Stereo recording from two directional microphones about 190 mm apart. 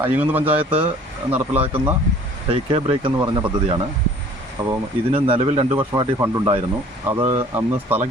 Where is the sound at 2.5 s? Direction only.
30° right (ahead or behind).